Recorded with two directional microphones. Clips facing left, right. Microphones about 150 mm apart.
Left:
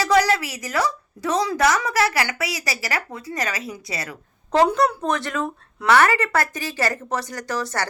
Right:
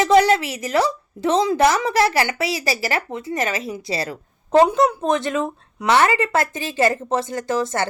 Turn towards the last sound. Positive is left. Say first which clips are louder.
# right 5 dB
turn(degrees=-20)  # may be behind; listen again after turning